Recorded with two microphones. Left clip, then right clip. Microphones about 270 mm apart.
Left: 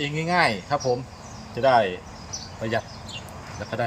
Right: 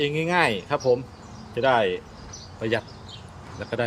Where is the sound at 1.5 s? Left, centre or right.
Centre.